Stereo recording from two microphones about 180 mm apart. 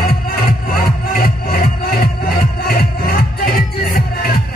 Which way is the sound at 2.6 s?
60° left (ahead or behind).